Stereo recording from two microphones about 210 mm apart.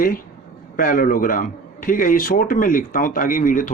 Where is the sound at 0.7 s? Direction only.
40° left (ahead or behind).